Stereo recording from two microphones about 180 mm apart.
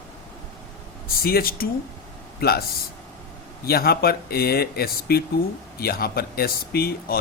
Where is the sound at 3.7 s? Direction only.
55° left (ahead or behind).